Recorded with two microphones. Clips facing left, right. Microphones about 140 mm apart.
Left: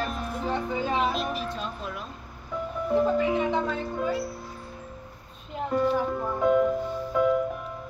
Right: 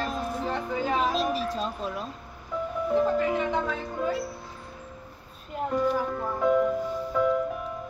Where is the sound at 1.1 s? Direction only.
35° right (ahead or behind).